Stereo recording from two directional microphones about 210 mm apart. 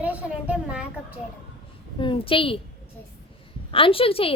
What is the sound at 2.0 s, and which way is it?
Speech, 25° left (ahead or behind).